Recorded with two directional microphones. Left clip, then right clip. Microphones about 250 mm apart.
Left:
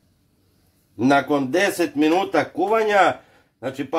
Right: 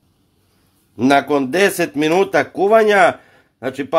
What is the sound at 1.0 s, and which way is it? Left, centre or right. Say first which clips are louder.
Speech: right 4 dB; right.